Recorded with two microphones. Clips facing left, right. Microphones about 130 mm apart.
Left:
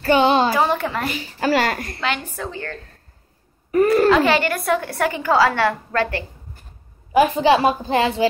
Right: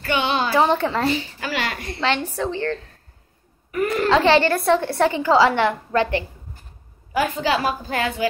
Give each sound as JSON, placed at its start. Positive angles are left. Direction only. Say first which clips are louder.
{"t": 0.0, "sound": "a woman's voice", "louder": "left 6 dB", "side_deg": 35}
{"t": 0.5, "sound": "a woman's voice", "louder": "right 1 dB", "side_deg": -25}
{"t": 1.4, "sound": "a woman's voice", "louder": "left 7 dB", "side_deg": 45}
{"t": 2.0, "sound": "a woman's voice", "louder": "right 3 dB", "side_deg": -30}
{"t": 3.7, "sound": "a child's voice", "louder": "left 7 dB", "side_deg": 40}
{"t": 4.1, "sound": "a woman's voice", "louder": "right 1 dB", "side_deg": -30}
{"t": 7.1, "sound": "a woman's voice", "louder": "left 6 dB", "side_deg": 20}